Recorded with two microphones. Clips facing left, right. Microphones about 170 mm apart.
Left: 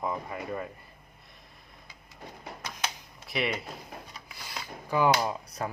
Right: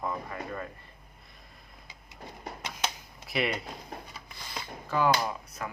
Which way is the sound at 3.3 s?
Centre (ahead or behind).